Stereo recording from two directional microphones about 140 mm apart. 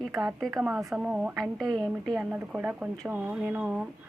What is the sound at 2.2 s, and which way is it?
Speech, 10° right (ahead or behind).